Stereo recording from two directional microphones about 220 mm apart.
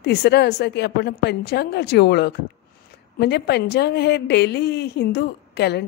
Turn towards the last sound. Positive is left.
turn(degrees=50)  # may be behind; listen again after turning